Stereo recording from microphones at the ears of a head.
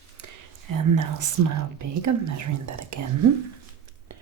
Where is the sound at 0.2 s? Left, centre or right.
Right.